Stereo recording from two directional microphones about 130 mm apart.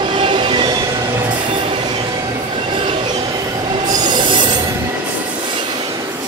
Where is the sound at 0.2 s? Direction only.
40° right (ahead or behind).